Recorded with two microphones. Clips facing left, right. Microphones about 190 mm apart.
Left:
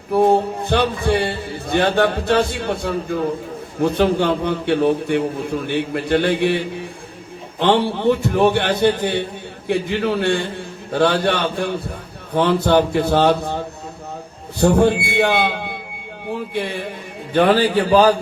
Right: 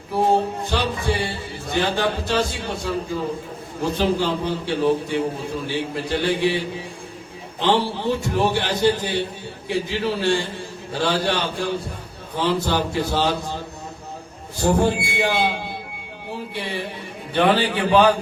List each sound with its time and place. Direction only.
0.1 s a man's voice: 60° left (ahead or behind)
7.6 s a man's voice: 60° left (ahead or behind)
14.6 s a man's voice: 65° left (ahead or behind)
17.3 s a man's voice: 40° left (ahead or behind)